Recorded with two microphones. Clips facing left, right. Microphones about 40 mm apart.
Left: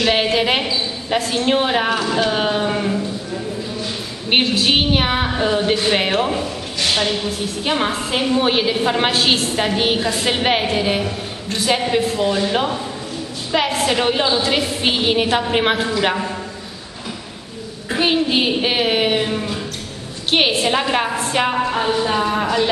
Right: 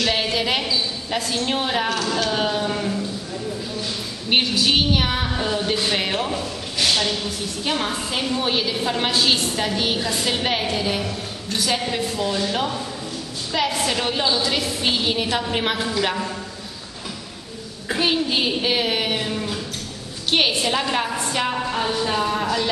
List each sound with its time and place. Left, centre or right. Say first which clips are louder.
0.0 s a woman's voice: left 5 dB; left
4.3 s a woman's voice: left 3 dB; left
17.9 s a woman's voice: left 4 dB; centre